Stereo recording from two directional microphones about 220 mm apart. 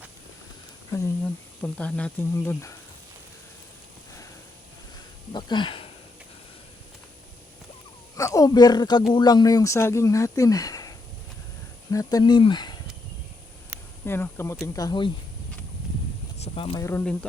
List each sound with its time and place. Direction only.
1.6 s speech: 5° left (ahead or behind)
5.3 s speech: 20° left (ahead or behind)
8.1 s speech: 15° left (ahead or behind)
14.0 s speech: 10° left (ahead or behind)
16.4 s speech: 25° left (ahead or behind)
16.8 s speech: 10° left (ahead or behind)